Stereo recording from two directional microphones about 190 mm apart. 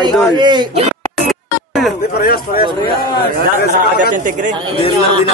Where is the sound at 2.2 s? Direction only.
50° left (ahead or behind).